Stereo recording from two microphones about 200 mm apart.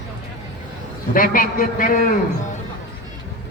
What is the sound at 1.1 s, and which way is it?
Speech, 45° left (ahead or behind).